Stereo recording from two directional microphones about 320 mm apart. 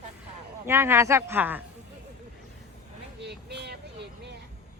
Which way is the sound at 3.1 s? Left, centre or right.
Right.